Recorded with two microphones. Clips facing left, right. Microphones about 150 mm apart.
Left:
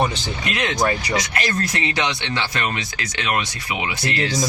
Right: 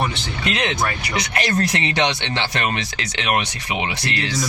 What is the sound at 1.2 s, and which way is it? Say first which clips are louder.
Speech: right 3 dB; 25° right (ahead or behind).